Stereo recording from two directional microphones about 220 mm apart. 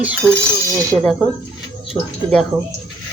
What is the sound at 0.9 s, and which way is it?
Speech, 20° right (ahead or behind).